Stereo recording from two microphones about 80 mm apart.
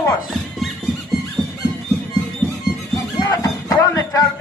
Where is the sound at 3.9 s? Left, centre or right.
Left.